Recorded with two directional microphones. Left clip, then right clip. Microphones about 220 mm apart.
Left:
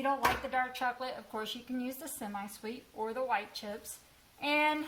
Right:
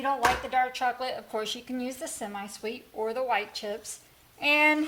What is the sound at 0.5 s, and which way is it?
A woman's voice, 35° right (ahead or behind).